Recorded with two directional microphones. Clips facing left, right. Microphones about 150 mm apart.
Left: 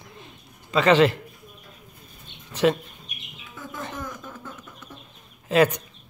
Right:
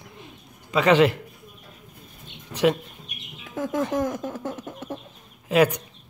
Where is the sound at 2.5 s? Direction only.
10° right (ahead or behind).